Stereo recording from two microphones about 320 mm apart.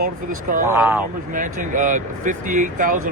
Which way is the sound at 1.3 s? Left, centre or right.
Right.